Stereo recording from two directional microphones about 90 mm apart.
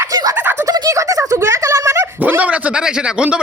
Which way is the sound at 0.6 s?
40° right (ahead or behind).